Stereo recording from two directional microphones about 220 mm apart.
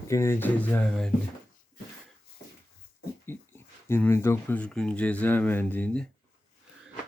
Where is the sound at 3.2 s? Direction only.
10° left (ahead or behind).